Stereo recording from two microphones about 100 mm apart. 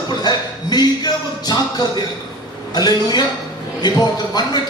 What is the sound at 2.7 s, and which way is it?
A man's voice, 45° left (ahead or behind).